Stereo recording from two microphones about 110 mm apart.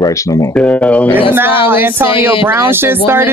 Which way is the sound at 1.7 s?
20° right (ahead or behind).